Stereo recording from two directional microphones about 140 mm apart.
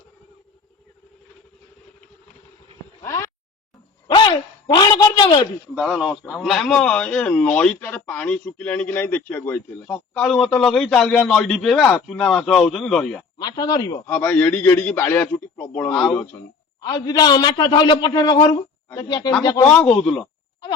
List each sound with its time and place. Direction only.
3.0 s a sound: 20° left (ahead or behind)
4.1 s a sound: 35° left (ahead or behind)
5.7 s a man's voice: 5° right (ahead or behind); by 9.9 s 15° left (ahead or behind)
9.9 s a man's voice: 5° left (ahead or behind)
13.4 s speech: 30° left (ahead or behind)
14.1 s a man's voice: 10° left (ahead or behind)
16.8 s a man's voice: 30° left (ahead or behind)
19.6 s a man's voice: 10° left (ahead or behind)